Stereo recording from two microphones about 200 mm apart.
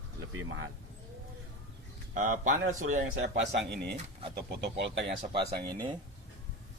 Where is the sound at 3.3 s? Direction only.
60° right (ahead or behind).